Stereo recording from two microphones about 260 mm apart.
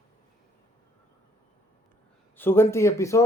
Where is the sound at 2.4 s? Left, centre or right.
Centre.